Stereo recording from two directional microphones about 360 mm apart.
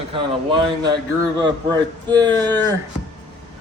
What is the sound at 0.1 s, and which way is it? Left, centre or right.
A man's voice, centre.